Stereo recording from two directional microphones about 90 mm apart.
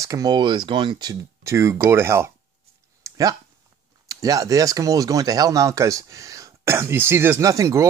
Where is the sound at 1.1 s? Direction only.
35° right (ahead or behind).